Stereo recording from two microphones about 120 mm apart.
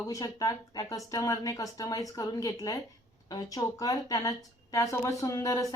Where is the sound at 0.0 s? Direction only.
30° left (ahead or behind).